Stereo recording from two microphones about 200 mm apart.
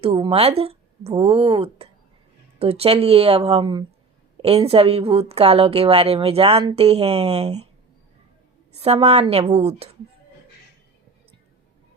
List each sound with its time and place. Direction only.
0.0 s a woman's voice: 30° right (ahead or behind)
8.8 s a woman's voice: 30° right (ahead or behind)